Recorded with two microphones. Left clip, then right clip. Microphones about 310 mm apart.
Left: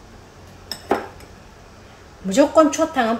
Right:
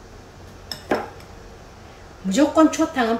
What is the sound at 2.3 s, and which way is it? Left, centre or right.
Speech, centre.